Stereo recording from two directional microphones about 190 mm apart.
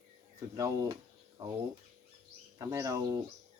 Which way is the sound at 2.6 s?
15° right (ahead or behind).